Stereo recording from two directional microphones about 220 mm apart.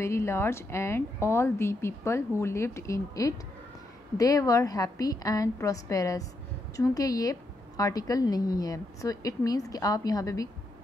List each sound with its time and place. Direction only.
0.0 s a woman's voice: 10° left (ahead or behind)